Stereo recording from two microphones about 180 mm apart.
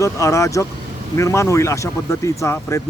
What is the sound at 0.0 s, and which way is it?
Speech, 15° left (ahead or behind).